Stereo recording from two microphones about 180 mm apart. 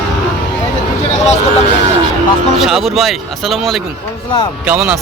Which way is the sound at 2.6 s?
Centre (ahead or behind).